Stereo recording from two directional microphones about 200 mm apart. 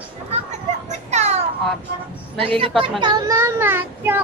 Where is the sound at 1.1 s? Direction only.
35° right (ahead or behind).